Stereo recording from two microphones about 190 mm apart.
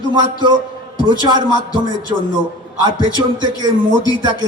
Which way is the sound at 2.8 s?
25° right (ahead or behind).